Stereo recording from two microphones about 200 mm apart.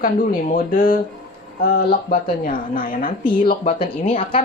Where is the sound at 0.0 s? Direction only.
45° left (ahead or behind).